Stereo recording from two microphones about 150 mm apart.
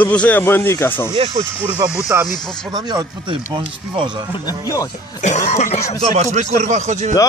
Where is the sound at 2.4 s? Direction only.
5° left (ahead or behind).